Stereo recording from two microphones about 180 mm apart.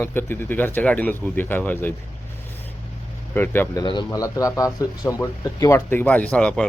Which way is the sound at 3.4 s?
10° left (ahead or behind).